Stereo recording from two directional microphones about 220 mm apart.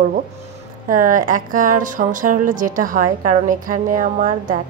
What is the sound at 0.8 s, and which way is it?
A woman's voice, 40° right (ahead or behind).